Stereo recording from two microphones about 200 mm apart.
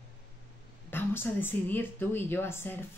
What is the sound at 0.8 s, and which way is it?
A woman's voice, 10° left (ahead or behind).